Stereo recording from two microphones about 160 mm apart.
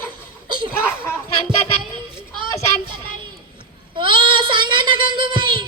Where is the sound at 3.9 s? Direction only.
30° right (ahead or behind).